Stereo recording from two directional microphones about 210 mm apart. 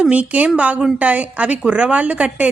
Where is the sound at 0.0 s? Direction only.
5° right (ahead or behind).